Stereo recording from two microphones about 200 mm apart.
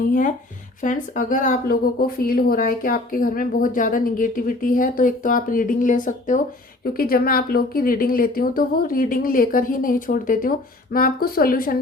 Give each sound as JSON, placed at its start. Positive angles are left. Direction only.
{"t": 0.1, "sound": "a woman's voice", "side_deg": 40}